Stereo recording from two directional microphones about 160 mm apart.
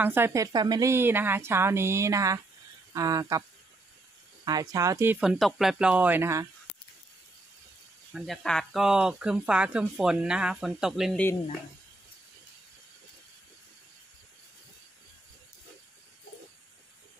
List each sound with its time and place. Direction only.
0.0 s a woman's voice: 15° right (ahead or behind)
4.5 s a woman's voice: 20° right (ahead or behind)
8.1 s speech: centre (ahead or behind)